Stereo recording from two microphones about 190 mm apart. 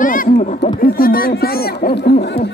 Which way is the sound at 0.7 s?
50° left (ahead or behind).